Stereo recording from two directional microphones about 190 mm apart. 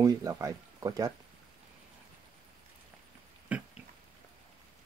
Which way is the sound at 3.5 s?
5° right (ahead or behind).